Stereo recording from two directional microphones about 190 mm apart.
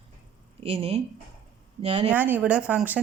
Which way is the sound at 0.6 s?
30° right (ahead or behind).